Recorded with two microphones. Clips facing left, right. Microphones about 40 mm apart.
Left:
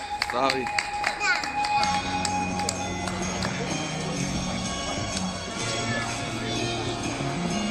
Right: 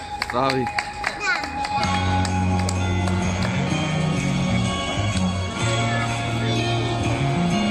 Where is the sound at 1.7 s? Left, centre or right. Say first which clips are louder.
Right 6 dB; right.